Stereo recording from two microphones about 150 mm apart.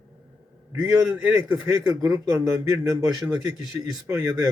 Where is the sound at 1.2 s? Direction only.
10° right (ahead or behind).